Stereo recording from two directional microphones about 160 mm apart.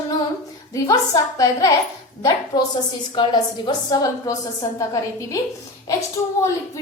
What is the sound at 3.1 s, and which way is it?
A woman's voice, 25° left (ahead or behind).